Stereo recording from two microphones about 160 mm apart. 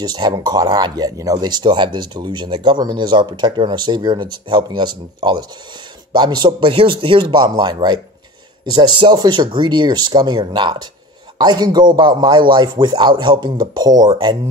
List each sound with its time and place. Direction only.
0.0 s speech: 25° right (ahead or behind)